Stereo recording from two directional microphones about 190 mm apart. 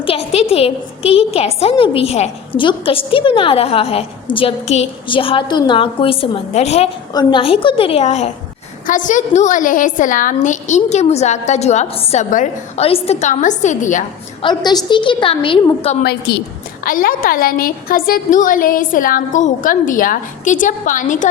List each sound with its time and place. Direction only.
0.0 s a woman's voice: 30° left (ahead or behind)
7.1 s a woman's voice: 20° left (ahead or behind); by 14.0 s 40° left (ahead or behind)
14.4 s a woman's voice: 20° left (ahead or behind)
16.0 s a woman's voice: 55° left (ahead or behind)